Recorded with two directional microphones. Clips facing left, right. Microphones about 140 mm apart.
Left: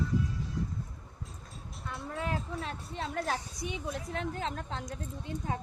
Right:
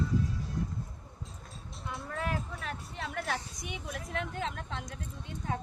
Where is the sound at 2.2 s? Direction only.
25° left (ahead or behind).